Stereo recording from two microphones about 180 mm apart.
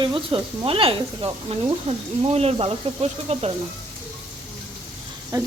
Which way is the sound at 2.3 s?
35° right (ahead or behind).